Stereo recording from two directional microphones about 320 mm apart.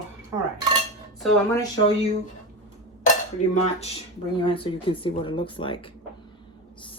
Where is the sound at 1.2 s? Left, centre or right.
Centre.